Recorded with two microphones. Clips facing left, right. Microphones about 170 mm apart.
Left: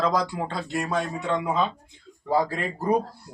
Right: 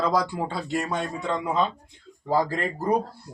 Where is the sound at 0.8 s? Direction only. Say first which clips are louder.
Left 1 dB; 10° left (ahead or behind).